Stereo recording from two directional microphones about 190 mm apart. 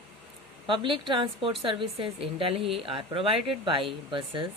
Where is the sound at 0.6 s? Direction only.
25° right (ahead or behind).